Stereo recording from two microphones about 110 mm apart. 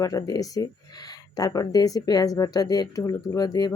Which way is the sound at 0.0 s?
30° left (ahead or behind).